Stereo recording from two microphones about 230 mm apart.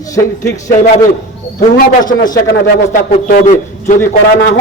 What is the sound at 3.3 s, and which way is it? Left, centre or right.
A man's voice, left.